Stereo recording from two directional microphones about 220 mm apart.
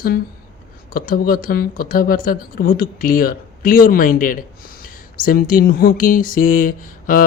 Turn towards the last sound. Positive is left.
turn(degrees=40)  # may be behind; listen again after turning